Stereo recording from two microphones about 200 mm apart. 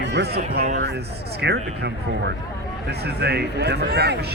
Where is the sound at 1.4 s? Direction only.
55° right (ahead or behind).